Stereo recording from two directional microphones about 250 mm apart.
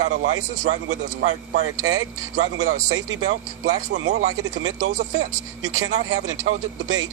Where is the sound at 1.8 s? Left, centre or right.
Right.